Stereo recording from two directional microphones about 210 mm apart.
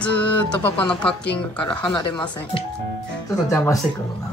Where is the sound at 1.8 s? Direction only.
20° left (ahead or behind).